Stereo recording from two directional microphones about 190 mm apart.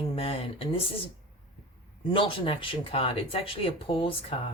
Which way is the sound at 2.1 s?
25° left (ahead or behind).